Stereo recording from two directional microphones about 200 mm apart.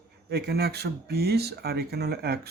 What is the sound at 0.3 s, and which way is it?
Speech, 55° right (ahead or behind).